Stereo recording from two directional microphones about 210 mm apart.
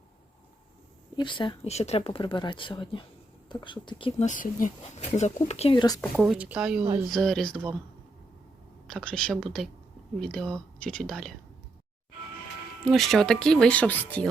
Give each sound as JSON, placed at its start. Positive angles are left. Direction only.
{"t": 1.1, "sound": "speech", "side_deg": 20}
{"t": 4.3, "sound": "speech", "side_deg": 35}
{"t": 6.1, "sound": "speech", "side_deg": -5}
{"t": 8.9, "sound": "speech", "side_deg": 5}
{"t": 12.8, "sound": "speech", "side_deg": 0}